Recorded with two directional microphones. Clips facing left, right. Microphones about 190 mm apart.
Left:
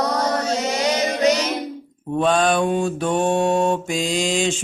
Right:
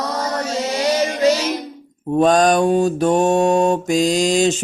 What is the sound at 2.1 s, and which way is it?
Mantra, 40° right (ahead or behind).